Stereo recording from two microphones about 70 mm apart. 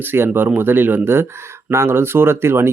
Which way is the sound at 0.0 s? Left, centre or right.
Right.